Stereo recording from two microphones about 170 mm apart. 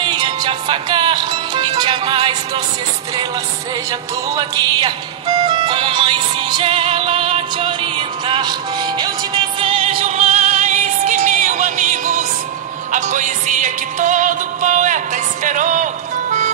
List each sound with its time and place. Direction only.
0.0 s music: 25° right (ahead or behind)
4.3 s music: 20° right (ahead or behind); by 16.5 s 45° right (ahead or behind)